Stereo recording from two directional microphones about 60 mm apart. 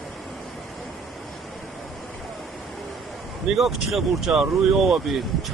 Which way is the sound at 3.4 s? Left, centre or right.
Centre.